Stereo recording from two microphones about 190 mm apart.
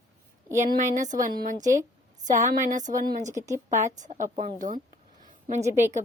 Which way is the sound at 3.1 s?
40° right (ahead or behind).